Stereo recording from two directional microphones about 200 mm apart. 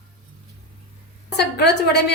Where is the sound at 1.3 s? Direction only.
55° left (ahead or behind).